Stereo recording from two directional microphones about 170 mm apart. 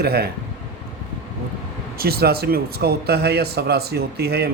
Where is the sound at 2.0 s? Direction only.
65° right (ahead or behind).